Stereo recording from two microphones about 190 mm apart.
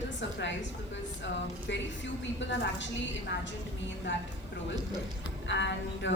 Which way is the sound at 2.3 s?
70° left (ahead or behind).